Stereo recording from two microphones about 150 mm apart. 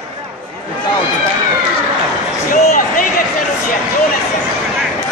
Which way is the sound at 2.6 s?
70° left (ahead or behind).